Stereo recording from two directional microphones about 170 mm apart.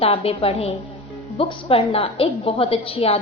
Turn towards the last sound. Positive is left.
turn(degrees=35)  # may be behind; listen again after turning